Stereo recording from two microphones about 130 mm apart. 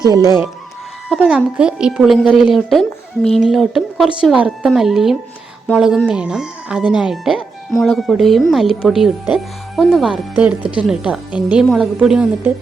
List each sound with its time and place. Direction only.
0.0 s speech: 30° right (ahead or behind)
1.1 s speech: 5° right (ahead or behind)